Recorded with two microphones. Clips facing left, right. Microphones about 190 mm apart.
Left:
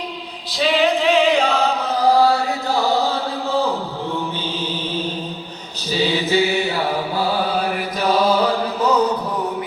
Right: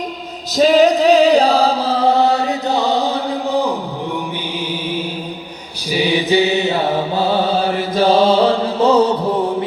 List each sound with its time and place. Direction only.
0.5 s chant: 40° right (ahead or behind); by 3.8 s 15° right (ahead or behind)
5.9 s mantra: 15° right (ahead or behind)